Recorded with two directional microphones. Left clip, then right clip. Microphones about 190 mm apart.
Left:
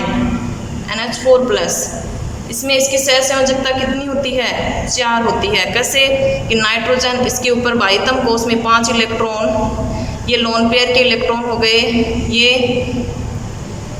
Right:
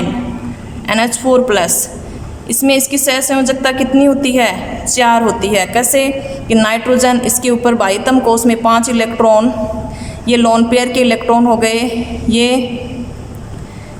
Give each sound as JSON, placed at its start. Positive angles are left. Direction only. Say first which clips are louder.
{"t": 0.9, "sound": "a woman's voice", "louder": "even", "side_deg": -45}